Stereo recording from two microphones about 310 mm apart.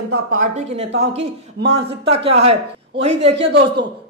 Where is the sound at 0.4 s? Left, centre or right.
Right.